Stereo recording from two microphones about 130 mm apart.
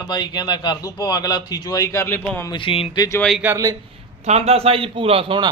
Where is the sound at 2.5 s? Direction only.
40° left (ahead or behind).